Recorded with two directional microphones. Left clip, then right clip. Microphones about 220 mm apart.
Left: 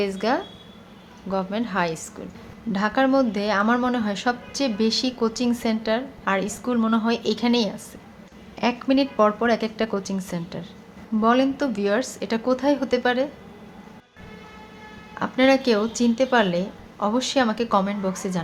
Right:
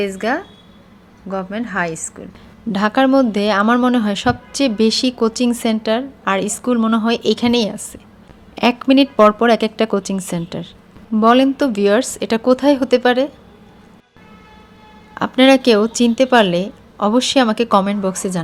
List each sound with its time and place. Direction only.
0.0 s a woman's voice: 15° right (ahead or behind)
2.7 s speech: 40° right (ahead or behind)
15.1 s speech: 40° right (ahead or behind)